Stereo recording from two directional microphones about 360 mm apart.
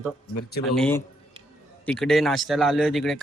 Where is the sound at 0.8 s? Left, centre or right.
Centre.